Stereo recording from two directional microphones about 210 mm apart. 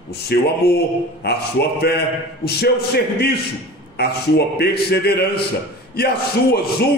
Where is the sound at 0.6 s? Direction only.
50° left (ahead or behind).